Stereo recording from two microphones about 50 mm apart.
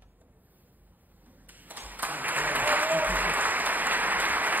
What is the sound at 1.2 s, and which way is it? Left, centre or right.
Applause, right.